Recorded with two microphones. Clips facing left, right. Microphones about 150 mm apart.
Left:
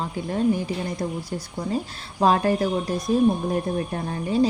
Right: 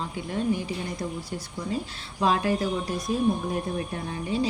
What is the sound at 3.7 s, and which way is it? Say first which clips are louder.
Speech: left 4 dB; 45° left (ahead or behind).